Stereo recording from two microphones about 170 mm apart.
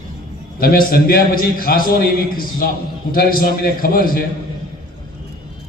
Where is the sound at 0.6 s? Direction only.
60° left (ahead or behind).